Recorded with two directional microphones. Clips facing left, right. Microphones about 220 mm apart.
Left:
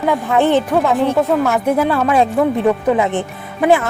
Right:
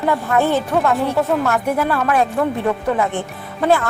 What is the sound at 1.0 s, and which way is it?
Speech, centre (ahead or behind).